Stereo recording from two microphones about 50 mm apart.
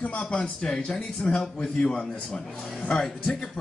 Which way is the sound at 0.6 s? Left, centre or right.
Centre.